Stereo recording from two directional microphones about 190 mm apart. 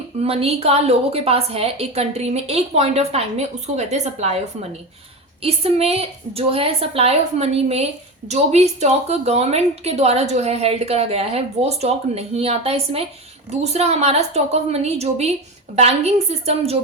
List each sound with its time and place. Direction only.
0.2 s a woman's voice: 30° right (ahead or behind)